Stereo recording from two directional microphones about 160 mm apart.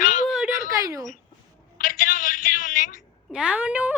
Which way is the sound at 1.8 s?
60° left (ahead or behind).